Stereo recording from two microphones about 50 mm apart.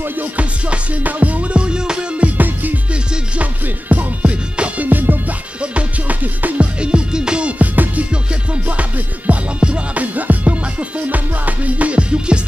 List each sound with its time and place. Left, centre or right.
0.0 s music: right
2.9 s music: right
3.6 s music: right
5.6 s music: right
6.8 s music: centre
8.1 s music: right